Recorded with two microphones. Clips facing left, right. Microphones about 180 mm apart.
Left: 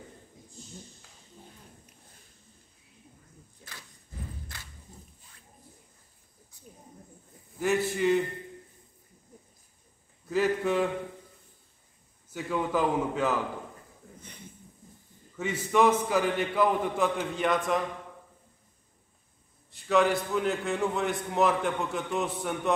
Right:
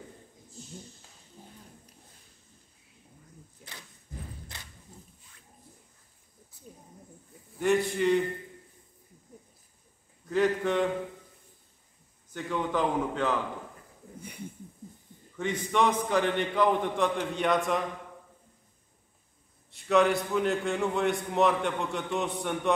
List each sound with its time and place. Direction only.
4.5 s a sound: 20° right (ahead or behind)
7.5 s a man's voice: 5° left (ahead or behind)
10.3 s a man's voice: 5° left (ahead or behind)
12.3 s a man's voice: 5° left (ahead or behind)
15.3 s a man's voice: 5° left (ahead or behind)
19.7 s a man's voice: centre (ahead or behind)